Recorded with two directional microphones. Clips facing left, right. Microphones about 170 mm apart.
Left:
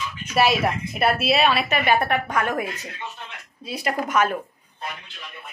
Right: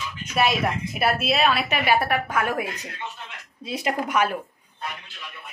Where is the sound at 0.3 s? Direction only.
Centre (ahead or behind).